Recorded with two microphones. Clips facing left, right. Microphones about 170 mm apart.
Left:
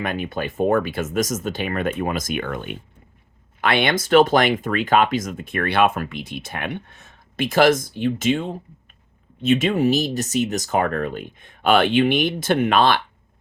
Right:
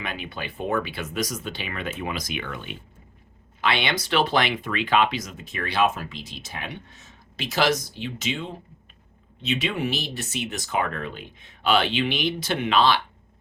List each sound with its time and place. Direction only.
0.0 s speech: 50° left (ahead or behind)